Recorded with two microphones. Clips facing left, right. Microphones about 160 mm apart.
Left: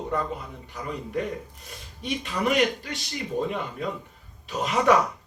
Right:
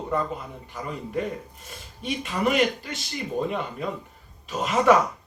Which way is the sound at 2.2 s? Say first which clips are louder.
Right 2 dB; 45° right (ahead or behind).